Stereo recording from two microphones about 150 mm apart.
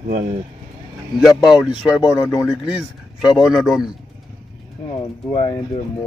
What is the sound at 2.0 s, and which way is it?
Speech, 25° left (ahead or behind).